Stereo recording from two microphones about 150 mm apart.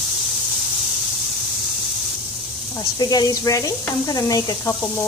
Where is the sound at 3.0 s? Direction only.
25° left (ahead or behind).